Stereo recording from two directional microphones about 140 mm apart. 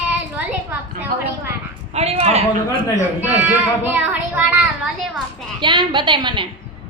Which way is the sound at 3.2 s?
15° right (ahead or behind).